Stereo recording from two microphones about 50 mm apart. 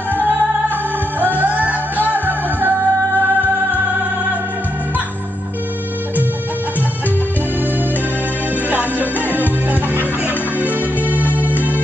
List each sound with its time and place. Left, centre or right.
1.4 s music: right
8.6 s music: right